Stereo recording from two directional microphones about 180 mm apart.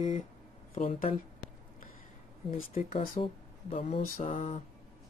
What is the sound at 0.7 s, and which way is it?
Speech, 45° left (ahead or behind).